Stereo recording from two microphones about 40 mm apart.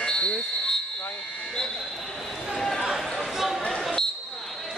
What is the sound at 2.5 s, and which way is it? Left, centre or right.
Basketball bounce, centre.